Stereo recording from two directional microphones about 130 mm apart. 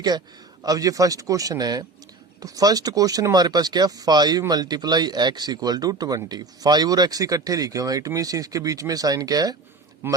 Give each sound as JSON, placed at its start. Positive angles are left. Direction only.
{"t": 0.6, "sound": "speech", "side_deg": -30}
{"t": 10.0, "sound": "a man's voice", "side_deg": -15}